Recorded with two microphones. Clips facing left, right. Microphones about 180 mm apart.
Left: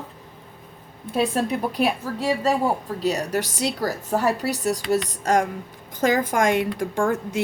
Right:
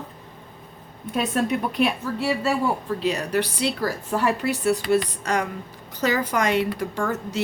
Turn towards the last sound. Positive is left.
turn(degrees=50)  # may be behind; listen again after turning